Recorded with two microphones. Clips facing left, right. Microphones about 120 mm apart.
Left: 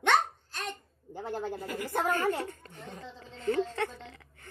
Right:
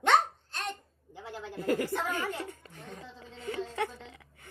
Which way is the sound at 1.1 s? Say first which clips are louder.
Left 7 dB; 50° left (ahead or behind).